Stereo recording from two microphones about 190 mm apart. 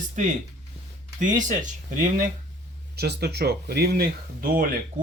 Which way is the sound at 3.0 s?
60° right (ahead or behind).